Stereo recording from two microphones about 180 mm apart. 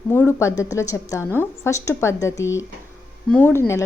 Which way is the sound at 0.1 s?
15° left (ahead or behind).